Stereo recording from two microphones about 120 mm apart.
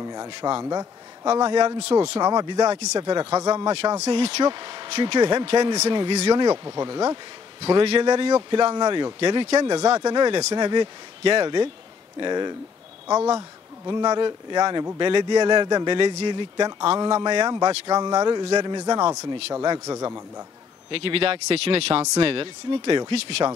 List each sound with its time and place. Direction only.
0.0 s a man's voice: 30° right (ahead or behind)
4.1 s speech: 45° right (ahead or behind)
5.7 s speech: 35° right (ahead or behind)
7.6 s speech: 55° right (ahead or behind)
8.0 s a man's voice: 35° right (ahead or behind)
20.9 s speech: 50° right (ahead or behind)